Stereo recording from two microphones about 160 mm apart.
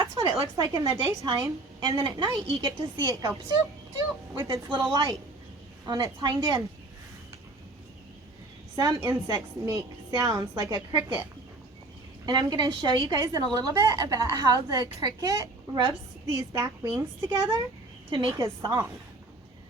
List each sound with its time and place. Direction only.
0.0 s a woman's voice: 20° right (ahead or behind)
4.4 s a woman's voice: 30° right (ahead or behind)
8.7 s a woman's voice: 25° right (ahead or behind)
10.9 s a woman's voice: 15° right (ahead or behind)
12.2 s a woman's voice: 25° right (ahead or behind)